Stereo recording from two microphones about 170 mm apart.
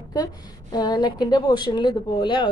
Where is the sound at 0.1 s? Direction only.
25° left (ahead or behind).